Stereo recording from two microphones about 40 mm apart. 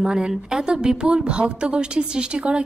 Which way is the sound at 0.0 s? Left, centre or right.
Right.